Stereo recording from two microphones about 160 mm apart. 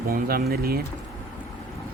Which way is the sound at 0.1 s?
70° right (ahead or behind).